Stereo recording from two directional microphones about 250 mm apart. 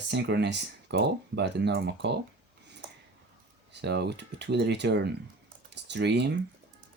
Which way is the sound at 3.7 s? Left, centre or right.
Right.